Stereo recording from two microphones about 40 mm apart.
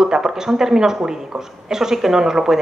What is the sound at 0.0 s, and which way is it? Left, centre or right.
Speech, centre.